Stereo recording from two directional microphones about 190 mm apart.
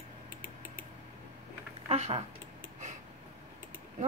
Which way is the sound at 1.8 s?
35° right (ahead or behind).